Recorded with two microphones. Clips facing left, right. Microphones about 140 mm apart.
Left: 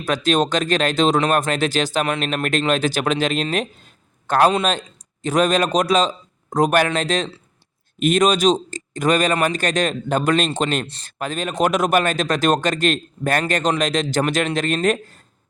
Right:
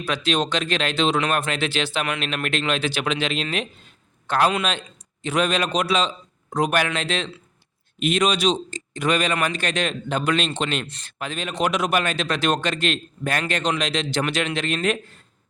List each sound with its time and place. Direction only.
0.0 s speech: 45° left (ahead or behind)